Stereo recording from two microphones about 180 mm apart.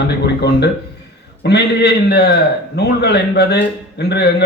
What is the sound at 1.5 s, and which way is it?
A man's voice, 65° left (ahead or behind).